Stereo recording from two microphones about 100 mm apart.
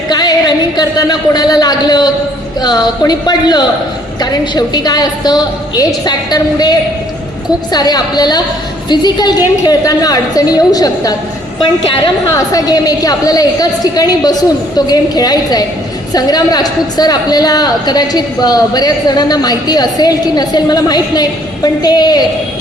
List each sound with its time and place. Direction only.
0.1 s a woman's voice: 45° left (ahead or behind)
12.3 s a woman's voice: 35° left (ahead or behind)